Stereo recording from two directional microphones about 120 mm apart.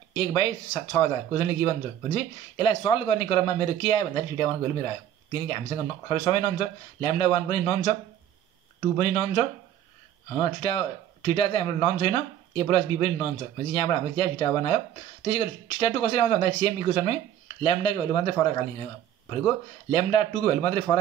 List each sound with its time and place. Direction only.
0.1 s a man's voice: 50° left (ahead or behind)
8.8 s speech: 50° left (ahead or behind)